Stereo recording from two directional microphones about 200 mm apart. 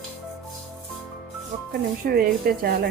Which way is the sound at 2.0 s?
45° right (ahead or behind).